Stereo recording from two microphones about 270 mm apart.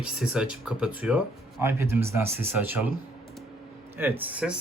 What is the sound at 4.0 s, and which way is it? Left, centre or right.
Speech, centre.